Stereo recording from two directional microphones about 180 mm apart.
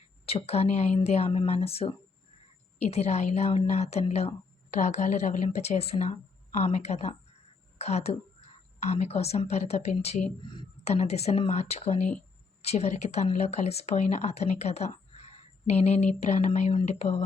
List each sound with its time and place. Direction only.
0.3 s a woman's voice: 35° left (ahead or behind)
10.4 s speech: 25° left (ahead or behind)